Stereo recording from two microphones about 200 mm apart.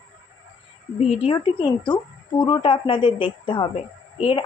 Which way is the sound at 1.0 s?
30° left (ahead or behind).